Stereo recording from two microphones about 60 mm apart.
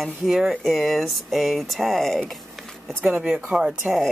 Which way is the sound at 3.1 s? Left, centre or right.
Centre.